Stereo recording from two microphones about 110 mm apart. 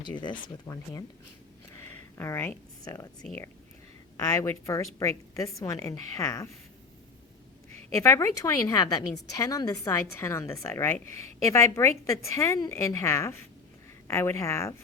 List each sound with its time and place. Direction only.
1.7 s a sound: 20° left (ahead or behind)
4.4 s a woman's voice: 25° left (ahead or behind)
8.0 s a woman's voice: 25° left (ahead or behind)